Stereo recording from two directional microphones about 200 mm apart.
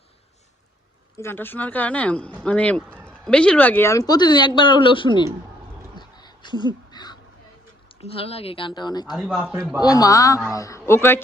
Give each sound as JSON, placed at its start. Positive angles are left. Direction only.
{"t": 1.2, "sound": "speech", "side_deg": 10}
{"t": 6.0, "sound": "crow", "side_deg": 20}
{"t": 8.1, "sound": "speech", "side_deg": 30}
{"t": 9.1, "sound": "a man's voice", "side_deg": -5}
{"t": 9.8, "sound": "speech", "side_deg": 20}